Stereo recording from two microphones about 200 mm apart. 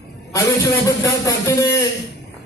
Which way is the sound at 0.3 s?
15° left (ahead or behind).